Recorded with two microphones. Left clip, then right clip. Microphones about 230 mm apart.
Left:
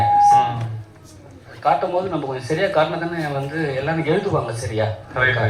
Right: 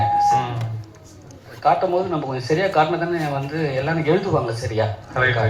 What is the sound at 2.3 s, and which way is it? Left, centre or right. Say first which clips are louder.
Speech: right 1 dB; right.